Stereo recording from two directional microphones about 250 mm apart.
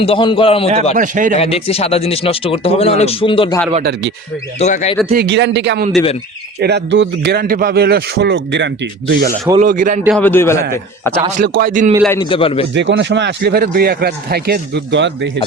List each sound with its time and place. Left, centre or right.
0.0 s speech: centre
0.9 s a man's voice: right
1.4 s speech: left
4.6 s speech: left
5.1 s a man's voice: right
10.2 s a man's voice: centre
11.3 s a man's voice: right
12.0 s speech: centre
12.7 s speech: right